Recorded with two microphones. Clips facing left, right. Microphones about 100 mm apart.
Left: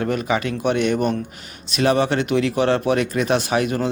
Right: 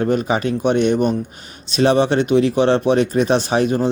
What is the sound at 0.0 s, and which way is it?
Speech, 30° right (ahead or behind).